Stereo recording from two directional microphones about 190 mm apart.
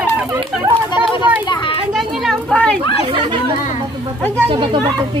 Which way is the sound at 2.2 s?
5° left (ahead or behind).